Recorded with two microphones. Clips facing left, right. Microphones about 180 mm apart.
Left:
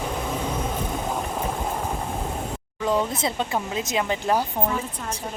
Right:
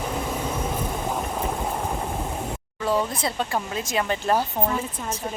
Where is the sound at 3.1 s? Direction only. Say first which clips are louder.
Left 1 dB; 20° left (ahead or behind).